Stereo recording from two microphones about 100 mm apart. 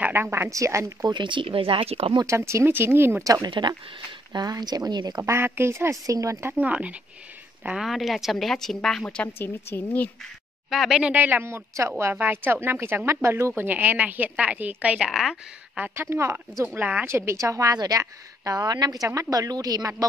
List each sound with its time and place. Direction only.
0.0 s a woman's voice: 20° right (ahead or behind)
1.0 s speech: 50° right (ahead or behind); by 2.1 s 80° right
2.2 s a woman's voice: 30° right (ahead or behind)
3.4 s speech: 50° right (ahead or behind)
4.3 s speech: 40° right (ahead or behind)
5.3 s a woman's voice: 25° right (ahead or behind)
6.4 s a woman's voice: 15° right (ahead or behind); by 10.1 s 15° left (ahead or behind)
10.7 s a woman's voice: 5° right (ahead or behind)
15.0 s a woman's voice: 5° right (ahead or behind)
15.8 s a woman's voice: 25° right (ahead or behind)